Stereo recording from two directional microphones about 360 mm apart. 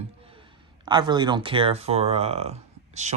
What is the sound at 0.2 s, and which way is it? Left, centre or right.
Speech, centre.